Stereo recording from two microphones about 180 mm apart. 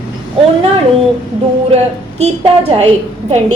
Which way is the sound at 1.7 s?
35° right (ahead or behind).